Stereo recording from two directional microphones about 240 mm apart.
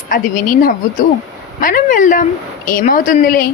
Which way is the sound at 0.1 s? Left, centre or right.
Left.